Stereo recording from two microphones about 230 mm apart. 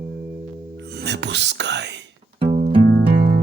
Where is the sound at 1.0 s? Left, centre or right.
Right.